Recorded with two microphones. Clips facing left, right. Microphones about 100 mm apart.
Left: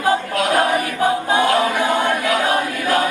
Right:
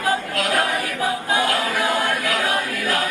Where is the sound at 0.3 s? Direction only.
25° left (ahead or behind).